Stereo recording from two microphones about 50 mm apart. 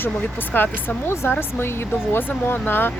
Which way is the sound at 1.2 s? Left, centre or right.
Left.